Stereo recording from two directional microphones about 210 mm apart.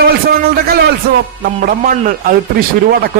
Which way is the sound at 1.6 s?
40° right (ahead or behind).